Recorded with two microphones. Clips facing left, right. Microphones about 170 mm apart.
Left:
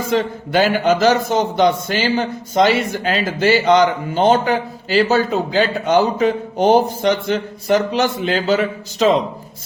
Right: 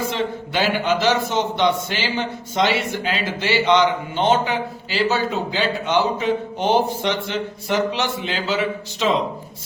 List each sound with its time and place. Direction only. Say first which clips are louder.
0.1 s a man's voice: left 6 dB; 45° left (ahead or behind)